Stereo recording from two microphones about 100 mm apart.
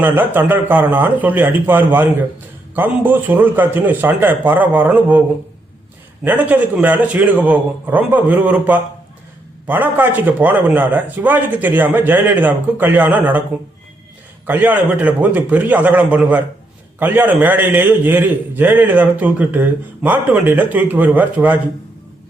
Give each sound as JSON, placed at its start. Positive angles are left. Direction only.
{"t": 0.0, "sound": "a man's voice", "side_deg": -20}
{"t": 6.2, "sound": "a man's voice", "side_deg": -15}
{"t": 14.4, "sound": "a man's voice", "side_deg": -20}